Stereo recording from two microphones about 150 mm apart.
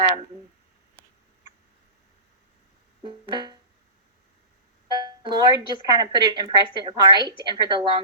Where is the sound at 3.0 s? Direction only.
30° right (ahead or behind).